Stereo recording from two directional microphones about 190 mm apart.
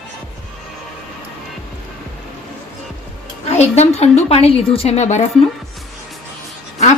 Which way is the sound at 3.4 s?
35° left (ahead or behind).